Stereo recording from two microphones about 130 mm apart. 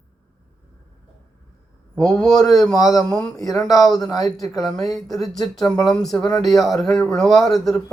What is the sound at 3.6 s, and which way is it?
Speech, centre (ahead or behind).